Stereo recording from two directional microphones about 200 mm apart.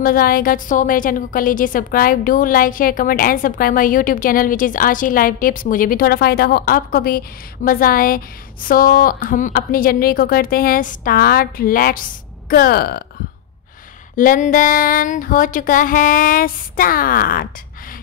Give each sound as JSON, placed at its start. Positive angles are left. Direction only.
{"t": 0.0, "sound": "a woman's voice", "side_deg": 45}
{"t": 14.1, "sound": "a woman's voice", "side_deg": 40}